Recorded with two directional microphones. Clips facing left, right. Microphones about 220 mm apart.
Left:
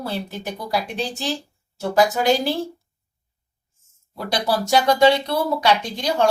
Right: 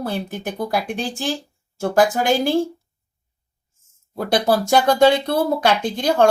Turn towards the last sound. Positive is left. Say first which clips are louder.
# right 3 dB
turn(degrees=-50)  # may be behind; listen again after turning